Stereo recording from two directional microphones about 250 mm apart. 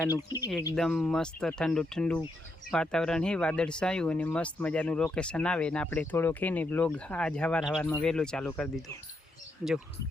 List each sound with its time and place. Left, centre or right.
0.3 s speech: centre
0.8 s speech: centre